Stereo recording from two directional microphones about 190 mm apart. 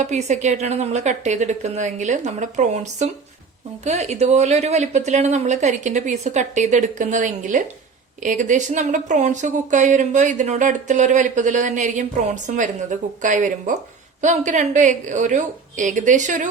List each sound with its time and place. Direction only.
0.0 s speech: 40° right (ahead or behind)